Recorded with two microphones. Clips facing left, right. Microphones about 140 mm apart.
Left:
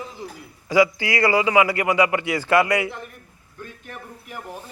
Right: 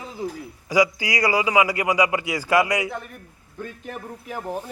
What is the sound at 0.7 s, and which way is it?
Speech, 15° right (ahead or behind).